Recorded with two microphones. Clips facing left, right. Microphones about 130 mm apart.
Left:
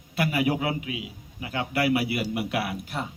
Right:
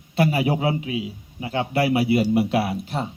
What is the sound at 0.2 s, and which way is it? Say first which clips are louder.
A man's voice: right 4 dB; 30° right (ahead or behind).